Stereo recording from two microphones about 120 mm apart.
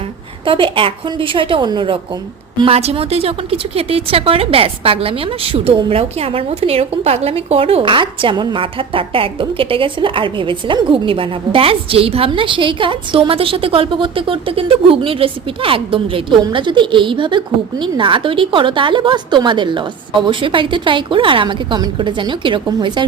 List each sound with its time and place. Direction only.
0.4 s a woman's voice: 45° right (ahead or behind)
2.6 s a woman's voice: 55° right (ahead or behind)